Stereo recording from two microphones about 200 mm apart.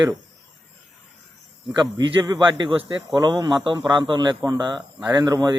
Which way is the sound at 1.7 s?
20° right (ahead or behind).